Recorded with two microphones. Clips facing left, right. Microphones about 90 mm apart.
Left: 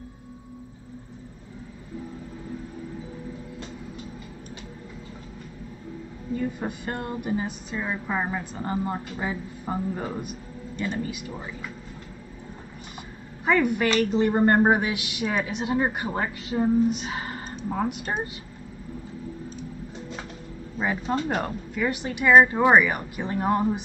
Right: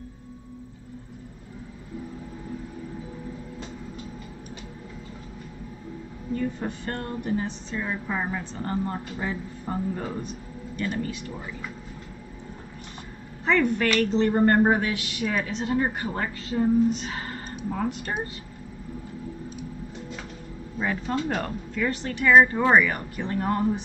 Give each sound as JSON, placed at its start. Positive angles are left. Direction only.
{"t": 6.3, "sound": "a woman's voice", "side_deg": 10}
{"t": 13.5, "sound": "a woman's voice", "side_deg": 10}
{"t": 21.3, "sound": "a woman's voice", "side_deg": 15}